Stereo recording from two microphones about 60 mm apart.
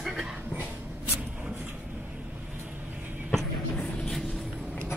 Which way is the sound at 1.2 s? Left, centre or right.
Right.